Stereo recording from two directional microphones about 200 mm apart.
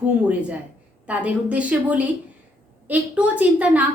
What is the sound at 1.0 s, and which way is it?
A woman's voice, 5° right (ahead or behind).